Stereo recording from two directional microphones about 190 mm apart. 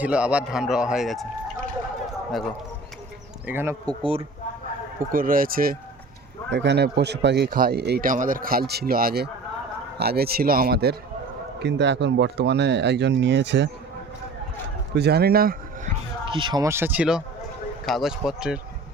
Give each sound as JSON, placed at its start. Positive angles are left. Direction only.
{"t": 0.0, "sound": "a man's voice", "side_deg": -5}
{"t": 3.4, "sound": "speech", "side_deg": -10}
{"t": 5.1, "sound": "speech", "side_deg": -50}
{"t": 6.5, "sound": "speech", "side_deg": -65}
{"t": 14.9, "sound": "speech", "side_deg": -60}
{"t": 16.2, "sound": "a man's voice", "side_deg": -25}